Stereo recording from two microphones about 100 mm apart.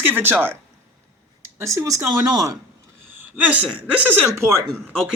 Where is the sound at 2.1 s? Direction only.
40° right (ahead or behind).